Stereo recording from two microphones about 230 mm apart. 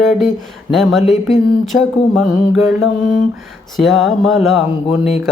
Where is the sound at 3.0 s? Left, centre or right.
Left.